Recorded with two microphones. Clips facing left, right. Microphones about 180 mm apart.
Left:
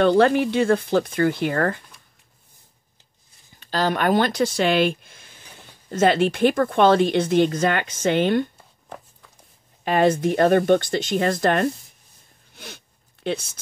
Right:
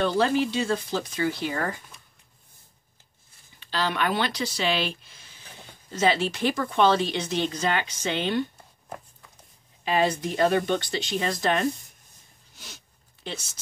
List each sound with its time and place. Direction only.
0.0 s speech: 60° left (ahead or behind)
3.5 s a woman's voice: 45° left (ahead or behind)
9.8 s a woman's voice: 50° left (ahead or behind)
12.5 s a sound: 60° left (ahead or behind)